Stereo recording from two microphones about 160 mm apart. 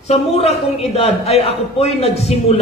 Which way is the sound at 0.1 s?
40° left (ahead or behind).